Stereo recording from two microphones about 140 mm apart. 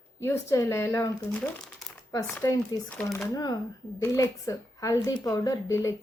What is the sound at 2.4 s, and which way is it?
Speech, 20° left (ahead or behind).